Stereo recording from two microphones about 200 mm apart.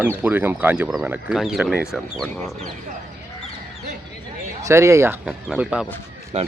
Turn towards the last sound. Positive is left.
turn(degrees=-35)  # may be behind; listen again after turning